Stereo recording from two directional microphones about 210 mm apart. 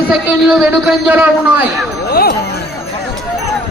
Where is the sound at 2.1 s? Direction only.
45° left (ahead or behind).